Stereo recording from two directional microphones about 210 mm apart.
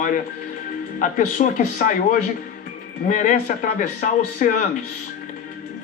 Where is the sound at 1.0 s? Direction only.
35° left (ahead or behind).